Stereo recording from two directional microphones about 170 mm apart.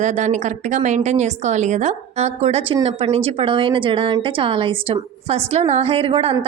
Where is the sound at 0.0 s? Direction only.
45° right (ahead or behind).